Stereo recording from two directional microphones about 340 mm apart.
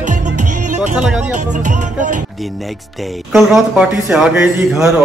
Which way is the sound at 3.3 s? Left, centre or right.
Centre.